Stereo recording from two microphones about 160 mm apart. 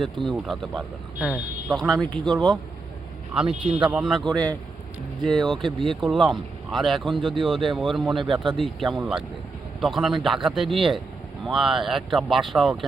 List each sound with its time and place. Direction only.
0.3 s speech: centre (ahead or behind)
7.2 s speech: 30° right (ahead or behind)
7.4 s speech: centre (ahead or behind)
8.2 s speech: 30° right (ahead or behind)
8.5 s speech: centre (ahead or behind)